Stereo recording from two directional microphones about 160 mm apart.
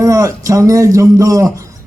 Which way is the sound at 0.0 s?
20° right (ahead or behind).